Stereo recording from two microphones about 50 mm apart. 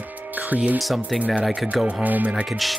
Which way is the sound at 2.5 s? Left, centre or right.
Centre.